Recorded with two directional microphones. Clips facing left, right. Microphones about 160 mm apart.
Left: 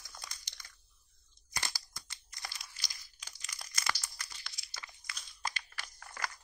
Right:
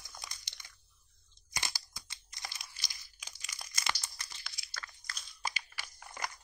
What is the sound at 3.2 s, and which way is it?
Crunch, 10° right (ahead or behind).